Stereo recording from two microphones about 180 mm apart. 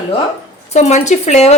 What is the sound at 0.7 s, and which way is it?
Speech, 40° left (ahead or behind).